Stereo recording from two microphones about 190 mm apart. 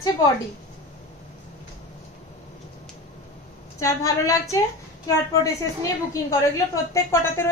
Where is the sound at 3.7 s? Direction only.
15° left (ahead or behind).